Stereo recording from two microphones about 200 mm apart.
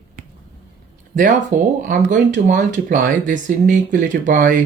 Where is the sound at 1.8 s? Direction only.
40° right (ahead or behind).